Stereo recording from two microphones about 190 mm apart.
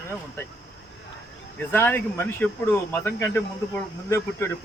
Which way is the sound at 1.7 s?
10° left (ahead or behind).